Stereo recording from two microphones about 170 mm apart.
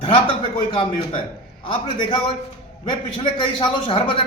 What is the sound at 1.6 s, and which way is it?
Speech, 30° left (ahead or behind).